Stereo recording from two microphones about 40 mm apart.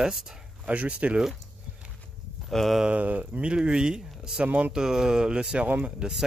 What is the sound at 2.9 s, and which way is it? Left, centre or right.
Speech, right.